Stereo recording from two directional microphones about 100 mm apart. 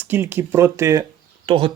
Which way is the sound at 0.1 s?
20° right (ahead or behind).